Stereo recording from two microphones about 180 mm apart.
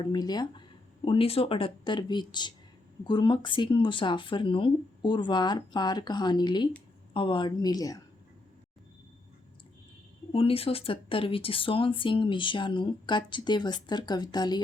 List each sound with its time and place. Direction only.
0.0 s speech: 25° left (ahead or behind)
10.3 s speech: 30° left (ahead or behind)